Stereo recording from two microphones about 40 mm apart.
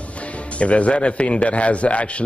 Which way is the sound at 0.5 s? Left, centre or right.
Left.